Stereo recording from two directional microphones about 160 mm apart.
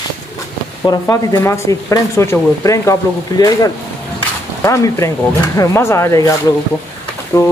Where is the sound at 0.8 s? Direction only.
15° left (ahead or behind).